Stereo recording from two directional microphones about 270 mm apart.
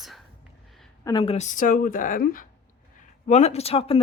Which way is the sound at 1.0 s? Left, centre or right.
Centre.